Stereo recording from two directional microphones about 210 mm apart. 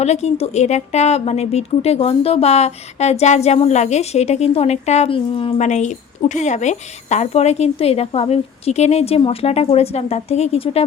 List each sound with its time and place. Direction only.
0.0 s speech: 30° left (ahead or behind)